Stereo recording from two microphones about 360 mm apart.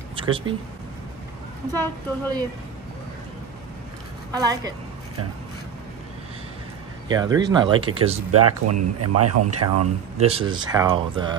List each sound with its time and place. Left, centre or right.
0.1 s speech: centre
1.7 s speech: centre
4.3 s speech: centre
7.1 s speech: centre
8.3 s speech: right
10.1 s speech: centre